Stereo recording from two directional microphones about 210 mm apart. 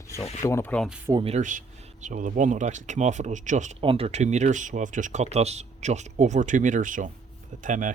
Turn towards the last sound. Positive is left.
turn(degrees=-40)  # may be behind; listen again after turning